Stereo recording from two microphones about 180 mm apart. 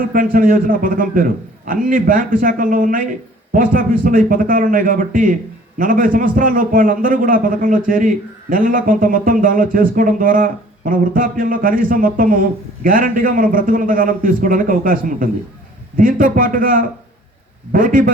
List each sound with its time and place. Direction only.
0.1 s a man's voice: 50° right (ahead or behind)